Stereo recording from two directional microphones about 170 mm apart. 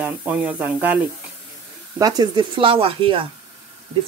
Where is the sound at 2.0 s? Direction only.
25° right (ahead or behind).